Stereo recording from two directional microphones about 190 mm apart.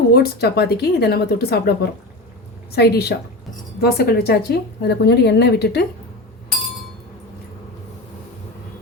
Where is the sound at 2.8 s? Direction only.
55° left (ahead or behind).